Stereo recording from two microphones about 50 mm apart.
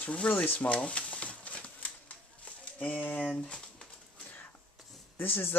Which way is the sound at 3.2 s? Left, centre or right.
Centre.